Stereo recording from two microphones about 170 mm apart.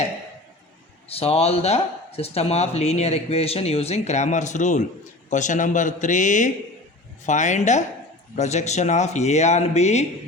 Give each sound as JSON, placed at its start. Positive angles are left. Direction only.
{"t": 1.2, "sound": "a man's voice", "side_deg": 35}